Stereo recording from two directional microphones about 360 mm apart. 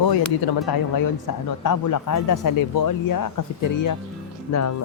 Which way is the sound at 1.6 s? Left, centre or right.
Left.